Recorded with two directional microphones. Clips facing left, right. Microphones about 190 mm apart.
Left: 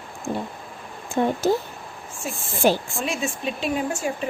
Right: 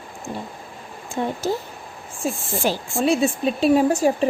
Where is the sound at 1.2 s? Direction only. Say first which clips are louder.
Left 3 dB; 60° left (ahead or behind).